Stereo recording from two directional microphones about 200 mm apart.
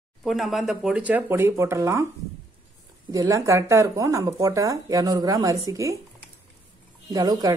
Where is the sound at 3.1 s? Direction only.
15° right (ahead or behind).